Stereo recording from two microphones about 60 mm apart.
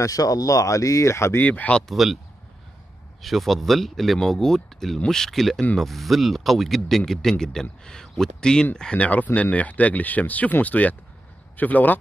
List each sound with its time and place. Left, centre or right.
0.0 s speech: left
1.4 s speech: left
1.9 s speech: centre
3.2 s speech: centre
8.9 s speech: left